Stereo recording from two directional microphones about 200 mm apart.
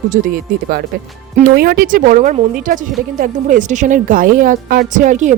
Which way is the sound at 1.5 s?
45° right (ahead or behind).